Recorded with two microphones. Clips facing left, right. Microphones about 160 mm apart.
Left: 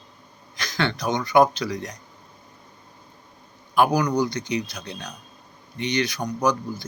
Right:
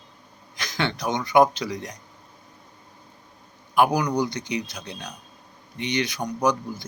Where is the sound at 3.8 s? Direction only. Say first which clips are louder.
Left 1 dB; 20° right (ahead or behind).